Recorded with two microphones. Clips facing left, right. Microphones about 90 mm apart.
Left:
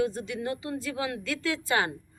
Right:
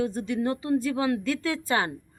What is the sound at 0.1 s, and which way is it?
Speech, 40° right (ahead or behind).